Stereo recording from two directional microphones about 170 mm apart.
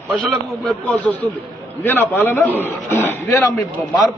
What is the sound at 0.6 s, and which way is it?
A man's voice, 5° left (ahead or behind).